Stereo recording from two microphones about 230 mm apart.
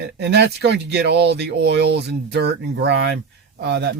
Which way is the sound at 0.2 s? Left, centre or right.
Right.